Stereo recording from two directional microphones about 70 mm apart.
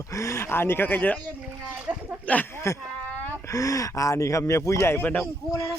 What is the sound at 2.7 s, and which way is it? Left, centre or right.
Speech, left.